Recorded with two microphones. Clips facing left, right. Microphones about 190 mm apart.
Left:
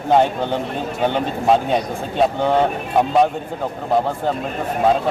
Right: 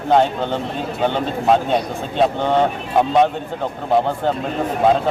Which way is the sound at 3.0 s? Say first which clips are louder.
Right 1 dB; centre (ahead or behind).